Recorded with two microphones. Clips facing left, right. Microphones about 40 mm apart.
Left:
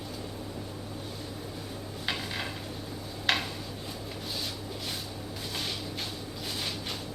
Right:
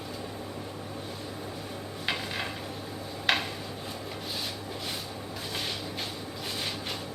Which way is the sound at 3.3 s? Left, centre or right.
Centre.